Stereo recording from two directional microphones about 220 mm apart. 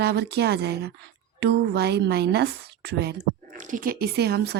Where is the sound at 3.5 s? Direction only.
35° right (ahead or behind).